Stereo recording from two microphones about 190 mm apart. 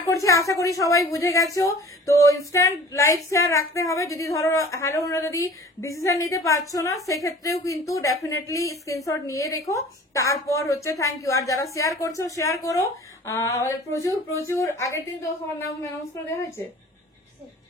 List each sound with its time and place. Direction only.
0.0 s a woman's voice: 15° left (ahead or behind)